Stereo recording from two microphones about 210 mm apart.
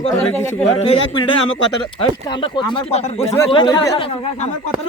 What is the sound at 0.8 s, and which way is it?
Speech, 25° left (ahead or behind).